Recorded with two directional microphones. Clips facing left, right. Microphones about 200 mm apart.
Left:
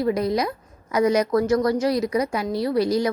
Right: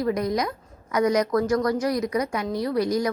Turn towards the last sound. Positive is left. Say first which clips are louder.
# left 2 dB
turn(degrees=30)  # may be behind; listen again after turning